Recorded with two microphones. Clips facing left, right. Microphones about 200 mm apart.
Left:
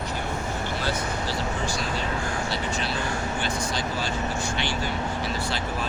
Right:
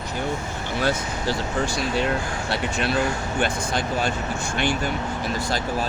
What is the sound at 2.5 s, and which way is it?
Speech, 60° right (ahead or behind).